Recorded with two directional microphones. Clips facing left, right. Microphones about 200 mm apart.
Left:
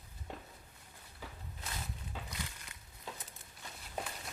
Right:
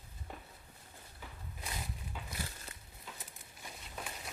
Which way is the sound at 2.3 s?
35° right (ahead or behind).